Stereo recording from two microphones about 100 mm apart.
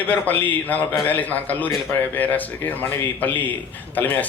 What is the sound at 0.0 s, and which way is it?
A man's voice, 15° left (ahead or behind).